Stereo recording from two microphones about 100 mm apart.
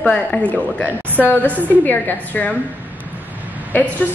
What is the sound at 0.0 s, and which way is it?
A woman's voice, 10° left (ahead or behind).